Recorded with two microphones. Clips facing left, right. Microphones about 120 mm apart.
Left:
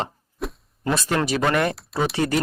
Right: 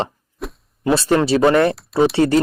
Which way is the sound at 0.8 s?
30° right (ahead or behind).